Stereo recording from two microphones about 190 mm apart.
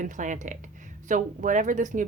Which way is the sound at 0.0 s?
40° right (ahead or behind).